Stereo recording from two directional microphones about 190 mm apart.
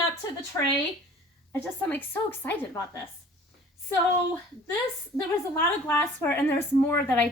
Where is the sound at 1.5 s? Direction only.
10° left (ahead or behind).